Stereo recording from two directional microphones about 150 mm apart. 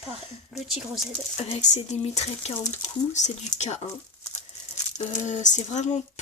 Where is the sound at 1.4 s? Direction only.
45° left (ahead or behind).